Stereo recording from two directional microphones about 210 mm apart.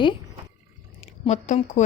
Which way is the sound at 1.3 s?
35° left (ahead or behind).